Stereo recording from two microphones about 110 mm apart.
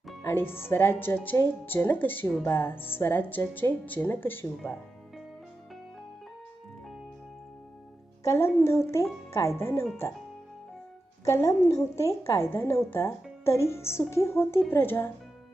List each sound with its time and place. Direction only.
0.2 s speech: 20° left (ahead or behind)
8.2 s speech: 25° left (ahead or behind)
11.3 s speech: 30° left (ahead or behind)